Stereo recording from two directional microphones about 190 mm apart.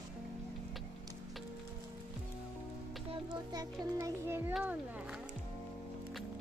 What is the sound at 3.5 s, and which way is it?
Music, 20° right (ahead or behind).